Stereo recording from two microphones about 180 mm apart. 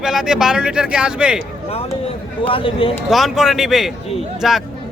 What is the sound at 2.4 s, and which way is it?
Speech, 30° left (ahead or behind).